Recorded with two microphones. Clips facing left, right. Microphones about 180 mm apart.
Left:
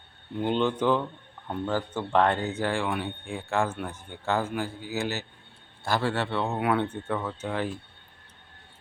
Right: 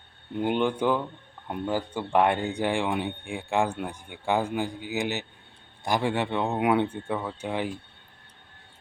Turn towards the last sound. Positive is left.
turn(degrees=-15)  # may be behind; listen again after turning